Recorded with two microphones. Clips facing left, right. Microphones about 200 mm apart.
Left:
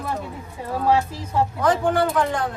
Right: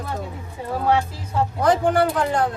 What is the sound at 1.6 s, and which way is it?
Speech, 35° right (ahead or behind).